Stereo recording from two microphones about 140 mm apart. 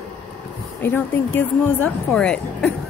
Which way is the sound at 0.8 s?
15° left (ahead or behind).